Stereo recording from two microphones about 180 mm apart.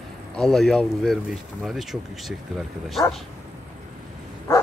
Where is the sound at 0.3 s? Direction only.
Centre (ahead or behind).